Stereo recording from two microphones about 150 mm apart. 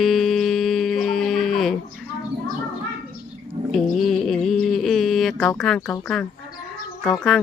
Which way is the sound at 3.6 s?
45° right (ahead or behind).